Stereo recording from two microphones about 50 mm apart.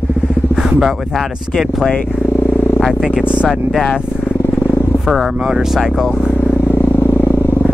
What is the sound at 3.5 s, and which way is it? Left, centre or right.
Speech, centre.